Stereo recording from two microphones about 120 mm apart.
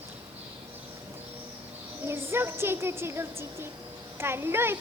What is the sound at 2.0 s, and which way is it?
A child's voice, 20° right (ahead or behind).